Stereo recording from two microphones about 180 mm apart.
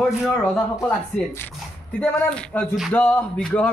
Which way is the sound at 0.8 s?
10° left (ahead or behind).